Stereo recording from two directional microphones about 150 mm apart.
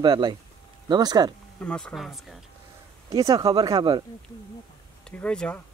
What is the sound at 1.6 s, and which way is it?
Speech, 10° left (ahead or behind).